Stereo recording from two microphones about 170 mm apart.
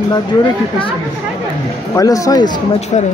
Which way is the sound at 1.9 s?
20° left (ahead or behind).